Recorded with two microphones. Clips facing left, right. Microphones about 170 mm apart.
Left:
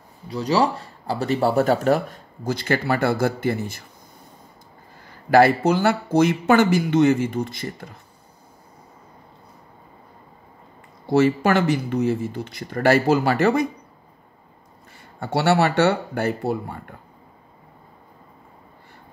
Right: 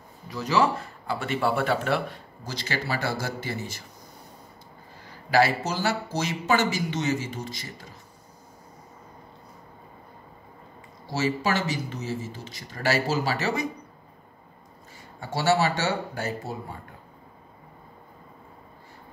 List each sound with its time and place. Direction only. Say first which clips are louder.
0.3 s speech: left 3 dB; 35° left (ahead or behind); by 3.8 s 55° left (ahead or behind)
5.3 s speech: left 7 dB; 55° left (ahead or behind)
11.1 s speech: left 8 dB; 55° left (ahead or behind)
15.1 s speech: left 4 dB; 60° left (ahead or behind)